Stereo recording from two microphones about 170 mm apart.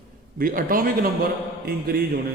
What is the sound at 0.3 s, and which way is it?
Speech, 55° right (ahead or behind).